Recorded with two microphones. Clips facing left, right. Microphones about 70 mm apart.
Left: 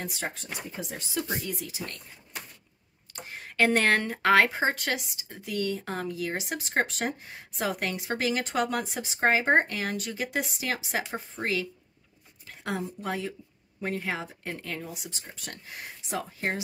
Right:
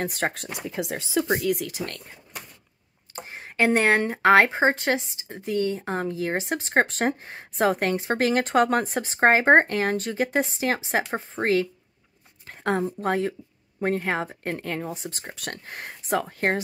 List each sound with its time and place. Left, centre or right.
0.0 s speech: right
0.7 s speech: right
3.3 s speech: right
15.2 s speech: right